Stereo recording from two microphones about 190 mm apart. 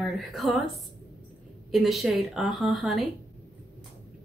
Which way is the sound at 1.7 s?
Centre (ahead or behind).